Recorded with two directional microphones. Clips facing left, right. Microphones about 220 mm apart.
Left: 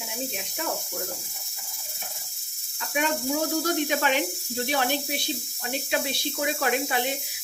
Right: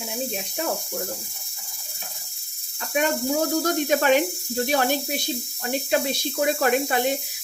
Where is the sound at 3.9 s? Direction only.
45° right (ahead or behind).